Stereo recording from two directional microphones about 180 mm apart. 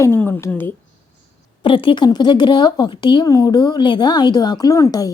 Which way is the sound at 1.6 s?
30° left (ahead or behind).